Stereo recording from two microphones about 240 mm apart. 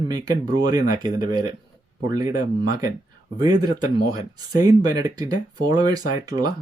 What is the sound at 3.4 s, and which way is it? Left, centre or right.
Speech, centre.